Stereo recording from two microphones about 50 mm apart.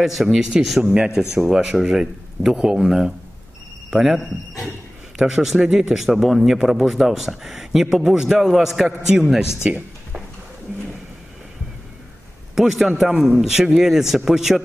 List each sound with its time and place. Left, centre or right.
0.0 s a man's voice: centre
0.9 s a man's voice: centre
2.5 s a man's voice: centre
9.6 s speech: right
12.5 s a man's voice: centre